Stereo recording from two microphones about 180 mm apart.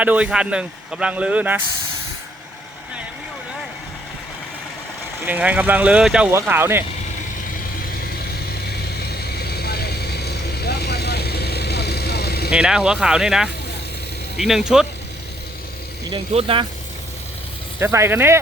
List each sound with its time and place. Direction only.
0.0 s a man's voice: 5° right (ahead or behind)
5.2 s a man's voice: 10° right (ahead or behind)
9.0 s vehicle: 60° left (ahead or behind)
12.5 s speech: 5° right (ahead or behind)
16.1 s speech: 30° right (ahead or behind)
17.7 s a man's voice: 15° right (ahead or behind)